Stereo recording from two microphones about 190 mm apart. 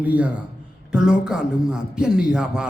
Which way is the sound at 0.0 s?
5° right (ahead or behind).